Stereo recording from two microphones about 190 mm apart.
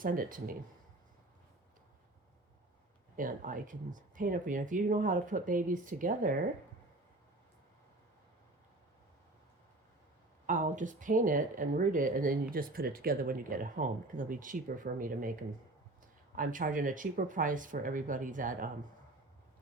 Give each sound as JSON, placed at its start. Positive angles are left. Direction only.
{"t": 0.0, "sound": "speech", "side_deg": -45}
{"t": 3.2, "sound": "speech", "side_deg": -45}
{"t": 10.4, "sound": "speech", "side_deg": -45}
{"t": 16.3, "sound": "speech", "side_deg": -45}